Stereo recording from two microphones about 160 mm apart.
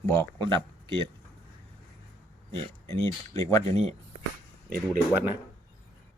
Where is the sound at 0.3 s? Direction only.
30° right (ahead or behind).